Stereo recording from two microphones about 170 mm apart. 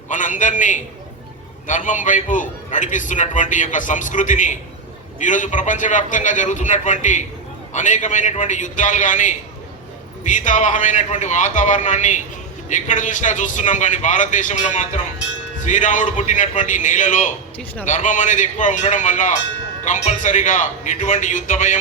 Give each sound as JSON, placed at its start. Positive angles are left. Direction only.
{"t": 0.1, "sound": "a man's voice", "side_deg": 50}